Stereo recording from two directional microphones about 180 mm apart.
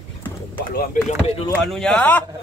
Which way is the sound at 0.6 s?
50° left (ahead or behind).